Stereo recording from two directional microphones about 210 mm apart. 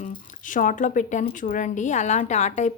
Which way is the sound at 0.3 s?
40° left (ahead or behind).